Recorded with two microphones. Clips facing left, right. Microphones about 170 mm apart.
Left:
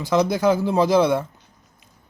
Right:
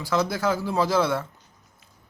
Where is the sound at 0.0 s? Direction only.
20° left (ahead or behind).